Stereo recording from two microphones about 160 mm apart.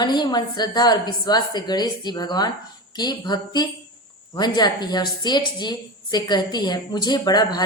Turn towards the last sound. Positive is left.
turn(degrees=25)  # may be behind; listen again after turning